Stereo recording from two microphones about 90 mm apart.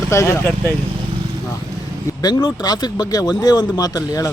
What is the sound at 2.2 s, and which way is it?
Speech, 45° left (ahead or behind).